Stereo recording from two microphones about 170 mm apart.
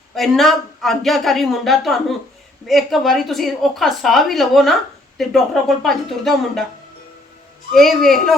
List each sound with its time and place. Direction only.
0.2 s a woman's voice: centre (ahead or behind)
7.7 s a woman's voice: centre (ahead or behind)